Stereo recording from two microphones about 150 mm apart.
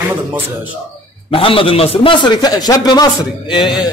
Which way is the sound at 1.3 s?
35° left (ahead or behind).